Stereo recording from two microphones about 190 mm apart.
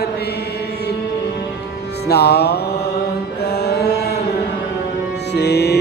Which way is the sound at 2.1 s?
60° left (ahead or behind).